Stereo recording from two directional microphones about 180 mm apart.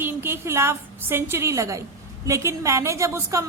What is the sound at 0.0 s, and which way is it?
A woman's voice, 15° right (ahead or behind).